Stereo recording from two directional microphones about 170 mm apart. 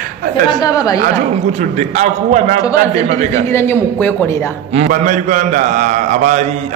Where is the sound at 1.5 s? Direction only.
45° right (ahead or behind).